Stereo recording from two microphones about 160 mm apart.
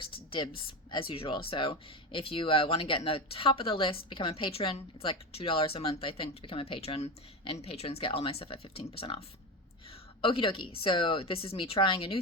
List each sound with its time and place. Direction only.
0.0 s speech: 35° left (ahead or behind)